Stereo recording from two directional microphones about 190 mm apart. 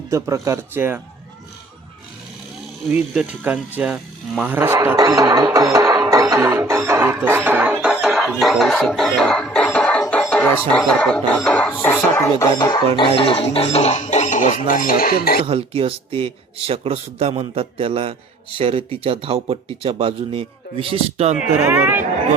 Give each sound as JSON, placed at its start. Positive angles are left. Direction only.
{"t": 0.1, "sound": "speech", "side_deg": -15}
{"t": 2.9, "sound": "speech", "side_deg": -10}
{"t": 10.7, "sound": "music", "side_deg": 5}
{"t": 13.0, "sound": "speech", "side_deg": 30}
{"t": 15.4, "sound": "speech", "side_deg": -30}
{"t": 21.7, "sound": "speech", "side_deg": -10}